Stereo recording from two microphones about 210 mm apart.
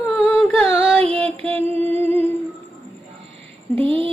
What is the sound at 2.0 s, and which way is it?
Humming, 10° left (ahead or behind).